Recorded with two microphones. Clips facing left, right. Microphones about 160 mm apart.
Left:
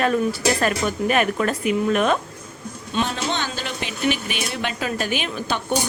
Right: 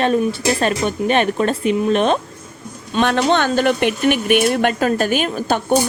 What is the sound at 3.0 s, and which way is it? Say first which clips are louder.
Speech: right 13 dB; 60° right (ahead or behind).